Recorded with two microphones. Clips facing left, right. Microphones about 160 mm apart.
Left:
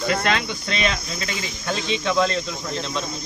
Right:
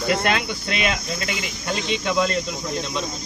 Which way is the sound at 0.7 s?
10° right (ahead or behind).